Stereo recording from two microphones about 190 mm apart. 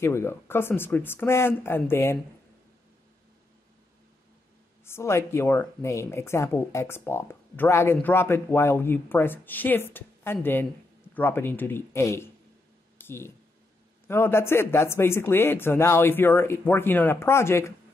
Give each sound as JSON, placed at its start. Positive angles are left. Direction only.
{"t": 0.0, "sound": "speech", "side_deg": 15}
{"t": 4.8, "sound": "speech", "side_deg": 15}
{"t": 12.9, "sound": "a sound", "side_deg": 10}
{"t": 14.0, "sound": "speech", "side_deg": 10}